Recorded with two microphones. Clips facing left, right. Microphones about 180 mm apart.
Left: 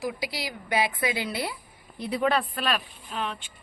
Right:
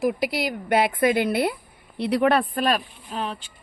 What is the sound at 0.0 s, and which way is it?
Speech, 55° right (ahead or behind).